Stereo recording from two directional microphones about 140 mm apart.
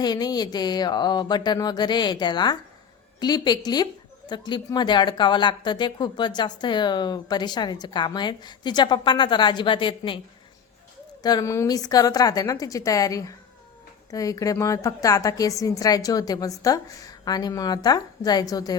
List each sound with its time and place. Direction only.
0.0 s a woman's voice: 30° left (ahead or behind)
11.2 s a woman's voice: 30° left (ahead or behind)